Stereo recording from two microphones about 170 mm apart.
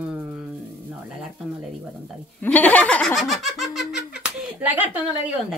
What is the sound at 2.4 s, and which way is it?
Speech, 10° left (ahead or behind).